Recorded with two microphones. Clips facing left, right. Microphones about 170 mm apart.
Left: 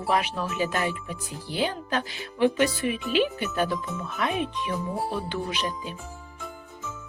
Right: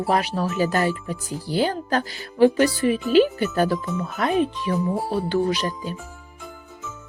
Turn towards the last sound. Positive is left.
turn(degrees=-40)  # may be behind; listen again after turning